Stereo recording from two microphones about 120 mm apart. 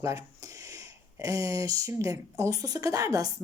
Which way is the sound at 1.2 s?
25° right (ahead or behind).